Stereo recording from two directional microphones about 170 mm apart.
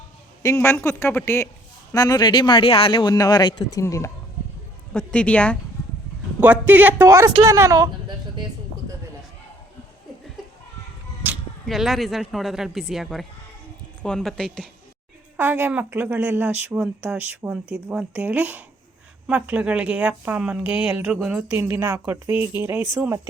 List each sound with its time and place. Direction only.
0.4 s a woman's voice: 15° left (ahead or behind)
4.9 s a woman's voice: 5° left (ahead or behind)
6.4 s speech: 10° right (ahead or behind)
11.2 s a sound: 10° right (ahead or behind)
11.7 s speech: centre (ahead or behind)
15.4 s speech: 10° right (ahead or behind)